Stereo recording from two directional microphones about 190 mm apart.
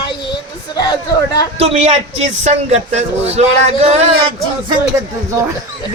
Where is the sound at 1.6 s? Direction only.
35° right (ahead or behind).